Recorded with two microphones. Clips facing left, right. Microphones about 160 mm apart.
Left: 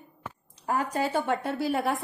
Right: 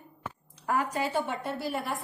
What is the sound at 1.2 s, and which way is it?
Speech, 75° left (ahead or behind).